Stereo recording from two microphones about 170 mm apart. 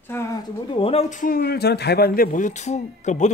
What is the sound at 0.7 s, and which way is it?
A man's voice, 35° left (ahead or behind).